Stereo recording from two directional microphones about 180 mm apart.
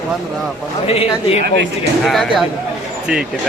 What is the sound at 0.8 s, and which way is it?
Speech, 35° left (ahead or behind).